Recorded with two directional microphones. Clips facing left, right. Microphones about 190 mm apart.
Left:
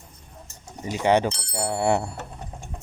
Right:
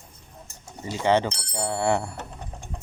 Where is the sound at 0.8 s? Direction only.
15° left (ahead or behind).